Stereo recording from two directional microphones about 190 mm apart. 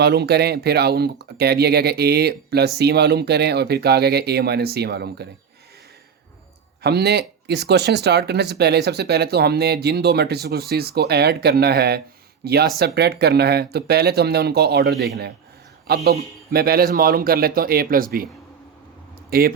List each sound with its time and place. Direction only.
0.0 s speech: 60° right (ahead or behind)
6.8 s a man's voice: 60° right (ahead or behind)
19.3 s speech: 50° right (ahead or behind)